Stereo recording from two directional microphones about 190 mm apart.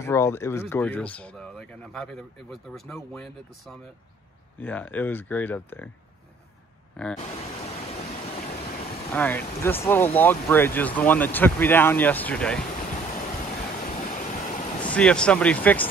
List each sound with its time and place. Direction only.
0.0 s speech: 15° left (ahead or behind)
7.0 s speech: 5° left (ahead or behind)
9.1 s speech: 10° left (ahead or behind)
13.8 s waterfall: 45° left (ahead or behind)
14.8 s speech: 5° left (ahead or behind)